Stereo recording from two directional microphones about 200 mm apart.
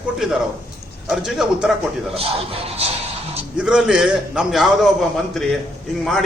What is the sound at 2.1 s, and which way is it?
Speech, 30° right (ahead or behind).